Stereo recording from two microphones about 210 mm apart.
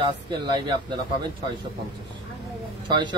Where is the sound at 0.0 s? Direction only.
20° right (ahead or behind).